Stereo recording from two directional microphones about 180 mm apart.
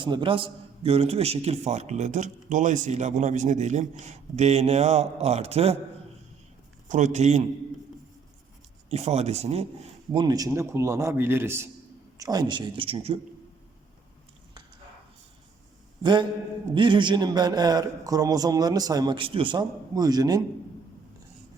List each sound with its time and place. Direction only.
0.0 s a man's voice: 25° right (ahead or behind)
6.8 s a man's voice: 40° right (ahead or behind)
8.9 s a man's voice: 35° right (ahead or behind)
10.1 s a man's voice: 25° right (ahead or behind)
16.7 s a man's voice: 25° right (ahead or behind)